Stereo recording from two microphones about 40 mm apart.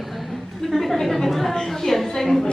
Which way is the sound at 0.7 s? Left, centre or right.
Centre.